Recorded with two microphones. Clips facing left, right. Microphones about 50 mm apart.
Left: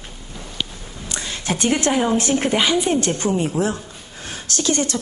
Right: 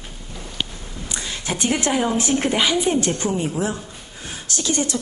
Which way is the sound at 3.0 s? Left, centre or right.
Right.